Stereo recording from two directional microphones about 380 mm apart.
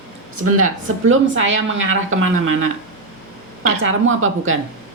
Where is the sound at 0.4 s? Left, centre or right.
Right.